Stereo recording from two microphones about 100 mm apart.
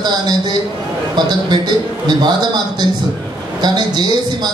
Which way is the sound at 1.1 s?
45° right (ahead or behind).